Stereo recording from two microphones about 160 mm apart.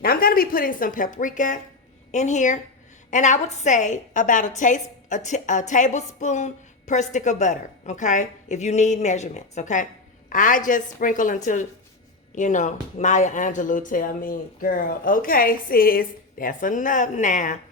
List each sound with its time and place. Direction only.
0.0 s a woman's voice: 65° left (ahead or behind)